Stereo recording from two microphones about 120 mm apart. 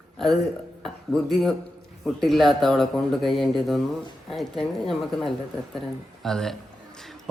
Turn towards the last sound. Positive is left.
turn(degrees=5)  # may be behind; listen again after turning